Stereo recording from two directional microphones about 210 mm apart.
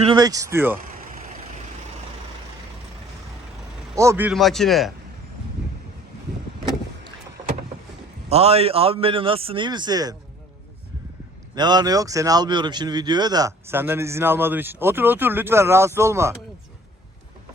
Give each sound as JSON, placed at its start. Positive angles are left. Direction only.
{"t": 0.0, "sound": "a man's voice", "side_deg": -20}
{"t": 3.9, "sound": "speech", "side_deg": -15}
{"t": 8.3, "sound": "a man's voice", "side_deg": -30}
{"t": 11.5, "sound": "a man's voice", "side_deg": -20}